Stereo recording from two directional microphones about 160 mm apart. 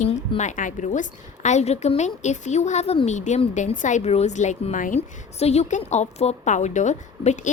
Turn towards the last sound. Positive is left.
turn(degrees=50)  # may be behind; listen again after turning